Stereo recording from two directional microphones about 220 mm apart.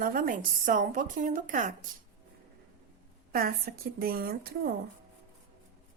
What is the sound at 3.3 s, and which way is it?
A woman's voice, 40° right (ahead or behind).